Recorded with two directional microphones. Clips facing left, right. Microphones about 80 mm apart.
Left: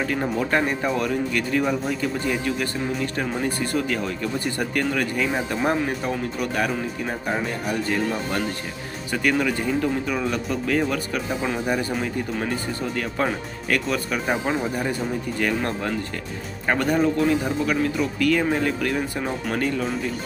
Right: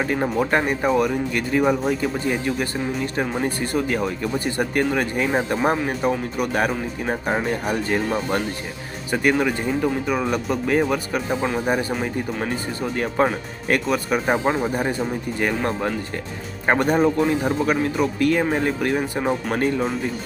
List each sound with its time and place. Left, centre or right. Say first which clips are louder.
0.0 s speech: right 3 dB; right
3.2 s speech: right 2 dB; right
13.2 s speech: right 6 dB; centre